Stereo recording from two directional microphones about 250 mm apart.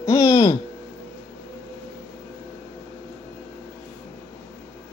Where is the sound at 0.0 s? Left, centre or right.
Centre.